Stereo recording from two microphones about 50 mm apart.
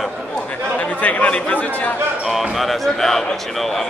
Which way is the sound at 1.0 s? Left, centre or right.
Left.